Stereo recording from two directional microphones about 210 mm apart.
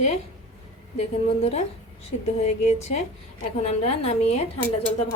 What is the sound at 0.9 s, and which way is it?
A woman's voice, 30° left (ahead or behind).